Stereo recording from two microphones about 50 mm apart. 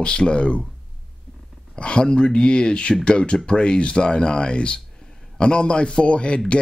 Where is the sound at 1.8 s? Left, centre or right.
Centre.